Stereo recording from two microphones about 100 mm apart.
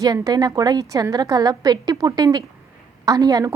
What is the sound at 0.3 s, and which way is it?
Speech, 40° right (ahead or behind).